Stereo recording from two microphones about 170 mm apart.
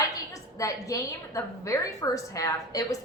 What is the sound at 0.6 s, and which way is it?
A woman's voice, 20° left (ahead or behind).